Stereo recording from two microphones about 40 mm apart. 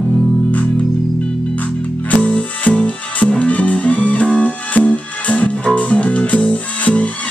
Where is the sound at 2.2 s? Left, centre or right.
Left.